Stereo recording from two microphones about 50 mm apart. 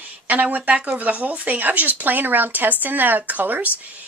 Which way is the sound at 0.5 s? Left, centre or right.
Right.